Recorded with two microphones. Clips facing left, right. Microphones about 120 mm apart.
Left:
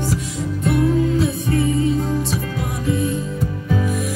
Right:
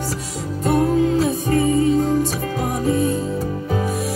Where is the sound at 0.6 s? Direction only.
40° right (ahead or behind).